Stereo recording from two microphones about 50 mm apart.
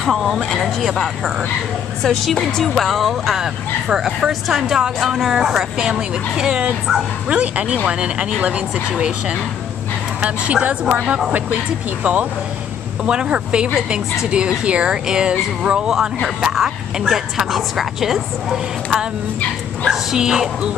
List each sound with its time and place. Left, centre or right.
0.0 s a woman's voice: centre; by 11.0 s right
12.0 s speech: right
13.0 s a woman's voice: centre